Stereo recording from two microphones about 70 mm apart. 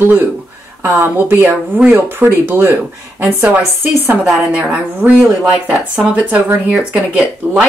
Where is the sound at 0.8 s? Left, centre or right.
Right; by 7.6 s centre.